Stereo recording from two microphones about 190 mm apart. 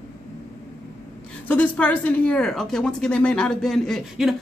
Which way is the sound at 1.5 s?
10° left (ahead or behind).